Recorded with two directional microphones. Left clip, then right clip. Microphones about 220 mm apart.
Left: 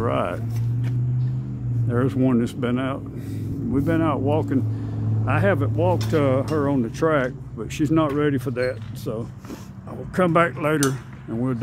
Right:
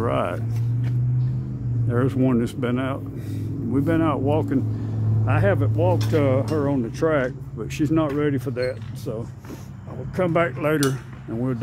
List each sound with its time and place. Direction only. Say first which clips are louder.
0.0 s vehicle: even; centre (ahead or behind)
1.9 s speech: even; centre (ahead or behind); by 10.5 s 20° left (ahead or behind)
10.6 s speech: even; 5° left (ahead or behind)